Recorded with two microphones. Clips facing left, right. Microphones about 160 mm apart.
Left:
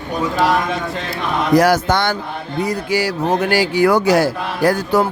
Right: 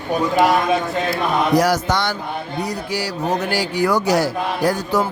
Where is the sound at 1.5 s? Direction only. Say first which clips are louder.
Left 7 dB; 55° left (ahead or behind).